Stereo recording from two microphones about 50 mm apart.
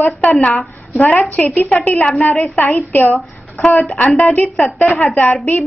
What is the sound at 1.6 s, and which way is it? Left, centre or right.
A woman's voice, left.